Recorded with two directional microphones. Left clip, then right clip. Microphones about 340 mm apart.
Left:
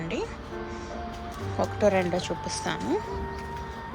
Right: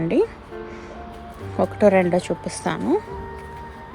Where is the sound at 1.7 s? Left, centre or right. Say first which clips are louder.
Right 8 dB; centre.